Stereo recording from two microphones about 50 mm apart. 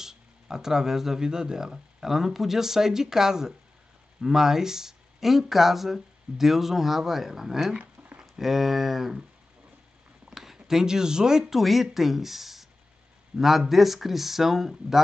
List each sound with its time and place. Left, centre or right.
0.0 s speech: centre
7.8 s a sound: right
8.2 s speech: centre
10.3 s speech: centre